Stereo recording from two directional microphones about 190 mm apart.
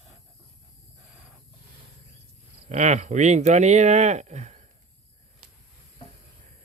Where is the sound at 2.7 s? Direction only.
40° right (ahead or behind).